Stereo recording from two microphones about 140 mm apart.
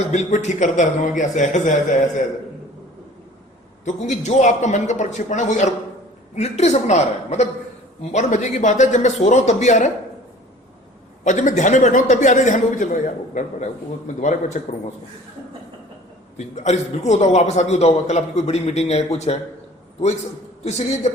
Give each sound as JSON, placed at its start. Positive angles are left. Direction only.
{"t": 0.1, "sound": "a man's voice", "side_deg": 55}
{"t": 3.8, "sound": "a man's voice", "side_deg": 60}
{"t": 11.2, "sound": "a man's voice", "side_deg": 60}
{"t": 16.6, "sound": "a man's voice", "side_deg": 55}
{"t": 20.7, "sound": "a man's voice", "side_deg": 50}